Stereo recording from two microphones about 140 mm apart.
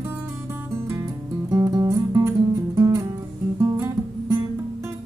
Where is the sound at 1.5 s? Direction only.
25° right (ahead or behind).